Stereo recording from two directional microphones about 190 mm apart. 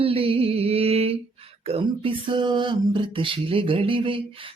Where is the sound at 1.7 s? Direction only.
30° right (ahead or behind).